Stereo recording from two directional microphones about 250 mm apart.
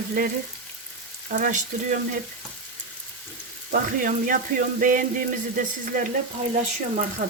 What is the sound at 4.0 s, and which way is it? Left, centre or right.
Frying, right.